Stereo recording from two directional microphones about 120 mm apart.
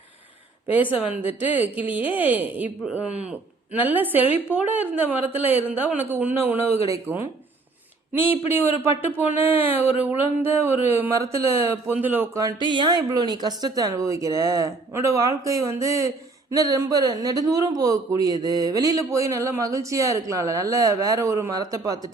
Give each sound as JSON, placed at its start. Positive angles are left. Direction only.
{"t": 0.7, "sound": "speech", "side_deg": -15}
{"t": 12.4, "sound": "speech", "side_deg": -35}